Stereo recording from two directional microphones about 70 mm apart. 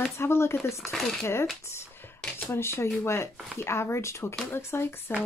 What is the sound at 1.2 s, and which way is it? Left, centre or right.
Speech, left.